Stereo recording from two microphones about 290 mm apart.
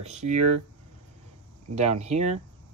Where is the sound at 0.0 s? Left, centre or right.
Right.